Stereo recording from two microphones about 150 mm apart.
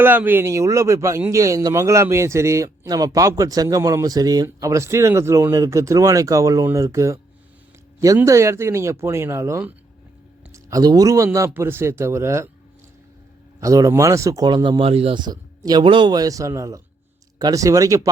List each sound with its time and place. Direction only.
0.0 s a man's voice: 15° right (ahead or behind)
13.6 s a man's voice: 20° right (ahead or behind); by 15.2 s 40° right (ahead or behind)
15.2 s a man's voice: 25° right (ahead or behind)